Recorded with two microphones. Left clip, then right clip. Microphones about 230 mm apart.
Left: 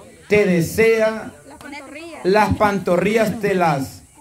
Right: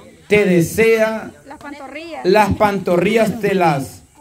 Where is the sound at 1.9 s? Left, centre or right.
Right.